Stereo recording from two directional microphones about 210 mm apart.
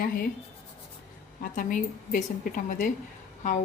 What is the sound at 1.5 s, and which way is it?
A woman's voice, 40° left (ahead or behind).